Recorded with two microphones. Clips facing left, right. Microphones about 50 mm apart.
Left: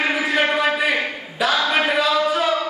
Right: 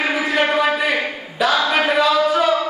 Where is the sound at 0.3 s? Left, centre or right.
Centre.